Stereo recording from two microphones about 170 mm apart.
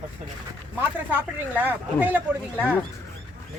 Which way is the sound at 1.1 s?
10° right (ahead or behind).